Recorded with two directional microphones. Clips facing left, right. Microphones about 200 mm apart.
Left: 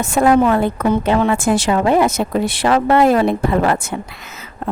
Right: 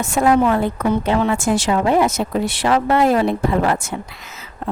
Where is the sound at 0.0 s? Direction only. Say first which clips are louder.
Left 2 dB; 55° left (ahead or behind).